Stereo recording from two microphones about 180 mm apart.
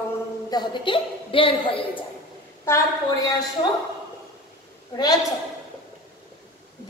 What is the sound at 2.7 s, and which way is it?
Speech, 15° left (ahead or behind).